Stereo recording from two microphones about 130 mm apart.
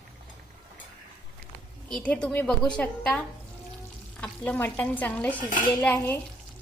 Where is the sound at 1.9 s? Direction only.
5° left (ahead or behind).